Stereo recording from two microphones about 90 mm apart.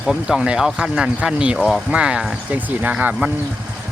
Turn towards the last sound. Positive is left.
turn(degrees=-15)  # may be behind; listen again after turning